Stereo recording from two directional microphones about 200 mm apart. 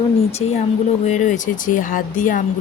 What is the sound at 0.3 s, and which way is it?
Speech, 30° left (ahead or behind).